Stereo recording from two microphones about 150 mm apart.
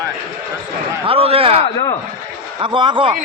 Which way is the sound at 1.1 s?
40° right (ahead or behind).